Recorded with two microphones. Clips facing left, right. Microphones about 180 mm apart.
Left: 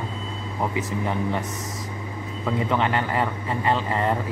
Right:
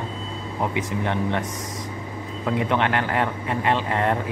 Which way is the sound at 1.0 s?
5° left (ahead or behind).